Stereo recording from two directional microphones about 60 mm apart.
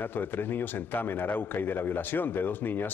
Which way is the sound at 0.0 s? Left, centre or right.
Left.